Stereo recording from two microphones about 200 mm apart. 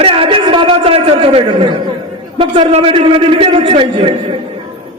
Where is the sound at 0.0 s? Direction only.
30° right (ahead or behind).